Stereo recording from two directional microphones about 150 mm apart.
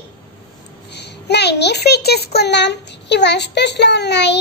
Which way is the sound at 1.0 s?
90° left.